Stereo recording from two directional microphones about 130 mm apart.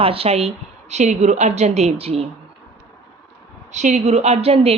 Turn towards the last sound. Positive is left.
turn(degrees=-50)  # may be behind; listen again after turning